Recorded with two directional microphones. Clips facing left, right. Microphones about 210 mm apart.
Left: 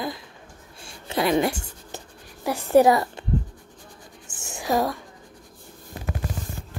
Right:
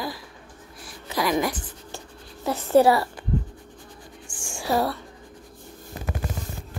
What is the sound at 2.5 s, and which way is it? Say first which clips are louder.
Speech: left 1 dB; 15° left (ahead or behind).